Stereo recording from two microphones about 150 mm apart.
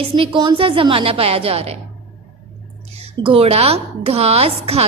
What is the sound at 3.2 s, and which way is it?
A woman's voice, 40° right (ahead or behind).